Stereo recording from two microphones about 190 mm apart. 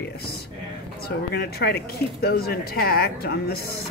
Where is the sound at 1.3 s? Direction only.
55° left (ahead or behind).